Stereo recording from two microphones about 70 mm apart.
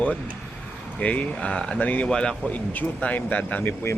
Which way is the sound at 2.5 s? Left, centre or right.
Left.